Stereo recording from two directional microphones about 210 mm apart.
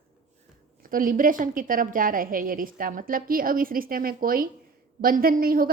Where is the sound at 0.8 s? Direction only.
40° right (ahead or behind).